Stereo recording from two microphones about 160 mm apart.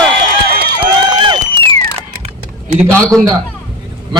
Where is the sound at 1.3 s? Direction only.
35° right (ahead or behind).